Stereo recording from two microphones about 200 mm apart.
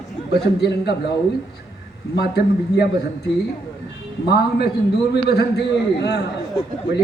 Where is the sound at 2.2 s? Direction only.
55° left (ahead or behind).